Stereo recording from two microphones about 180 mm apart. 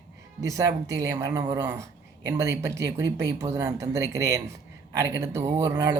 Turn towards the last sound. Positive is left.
turn(degrees=-15)  # may be behind; listen again after turning